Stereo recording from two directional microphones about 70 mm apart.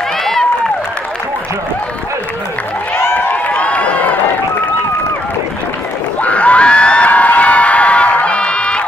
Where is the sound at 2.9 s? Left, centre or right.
Left.